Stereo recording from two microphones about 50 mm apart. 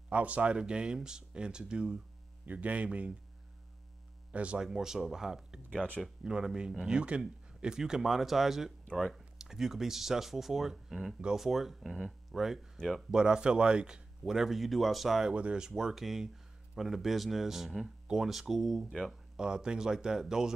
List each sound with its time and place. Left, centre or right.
0.1 s speech: right
0.6 s speech: centre
2.4 s speech: right
4.3 s speech: right
4.6 s speech: centre
14.2 s speech: centre
15.3 s speech: centre
19.3 s speech: centre